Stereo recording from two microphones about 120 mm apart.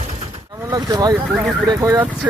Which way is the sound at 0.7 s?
35° right (ahead or behind).